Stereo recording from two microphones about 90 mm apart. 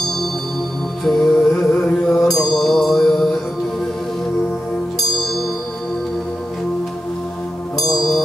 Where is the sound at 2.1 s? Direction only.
5° left (ahead or behind).